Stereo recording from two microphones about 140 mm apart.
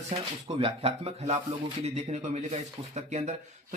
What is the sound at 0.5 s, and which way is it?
Speech, 45° right (ahead or behind).